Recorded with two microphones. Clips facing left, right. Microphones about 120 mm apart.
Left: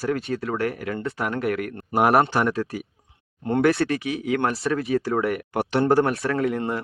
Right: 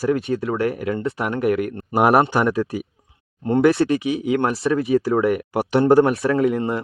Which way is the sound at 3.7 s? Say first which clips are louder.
Right 4 dB; 25° right (ahead or behind).